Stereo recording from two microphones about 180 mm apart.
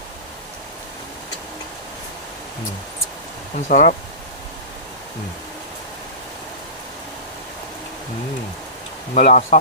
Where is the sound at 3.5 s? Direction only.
45° left (ahead or behind).